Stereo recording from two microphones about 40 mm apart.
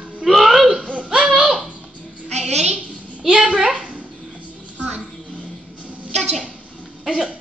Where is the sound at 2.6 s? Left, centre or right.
Centre.